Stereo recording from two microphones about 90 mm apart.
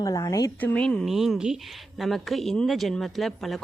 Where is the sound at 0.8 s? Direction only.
10° left (ahead or behind).